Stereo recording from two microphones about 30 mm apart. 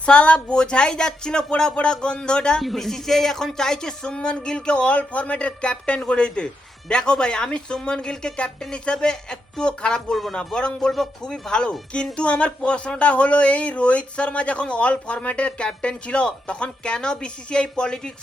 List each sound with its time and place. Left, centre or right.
0.0 s speech: left
2.6 s speech: centre; by 11.7 s left
12.1 s speech: left